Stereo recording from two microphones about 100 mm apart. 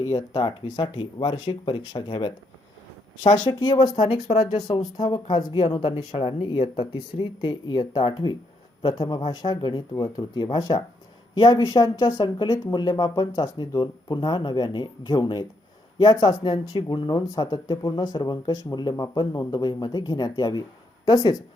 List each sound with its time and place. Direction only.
0.1 s speech: 35° left (ahead or behind)
0.4 s speech: 50° left (ahead or behind)
3.9 s speech: 65° left (ahead or behind)
4.8 s speech: 45° left (ahead or behind)
5.6 s speech: 60° left (ahead or behind)